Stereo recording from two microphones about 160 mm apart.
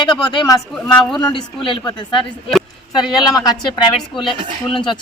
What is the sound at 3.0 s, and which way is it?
Speech, centre (ahead or behind).